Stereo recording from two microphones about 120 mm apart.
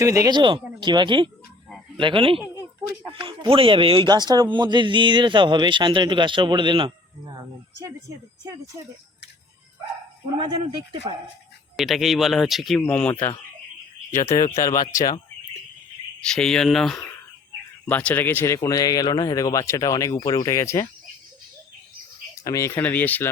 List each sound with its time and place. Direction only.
0.0 s speech: 25° right (ahead or behind)
0.3 s a man's voice: 40° right (ahead or behind)
4.1 s a man's voice: 35° right (ahead or behind)
11.8 s speech: centre (ahead or behind)
12.8 s speech: 15° left (ahead or behind)
14.3 s speech: 25° left (ahead or behind)
16.2 s speech: 5° left (ahead or behind)
17.8 s speech: 15° left (ahead or behind)
22.4 s speech: 25° left (ahead or behind)